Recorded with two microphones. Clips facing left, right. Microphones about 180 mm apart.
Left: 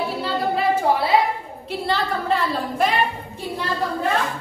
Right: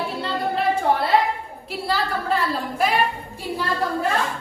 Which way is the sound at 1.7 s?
Centre (ahead or behind).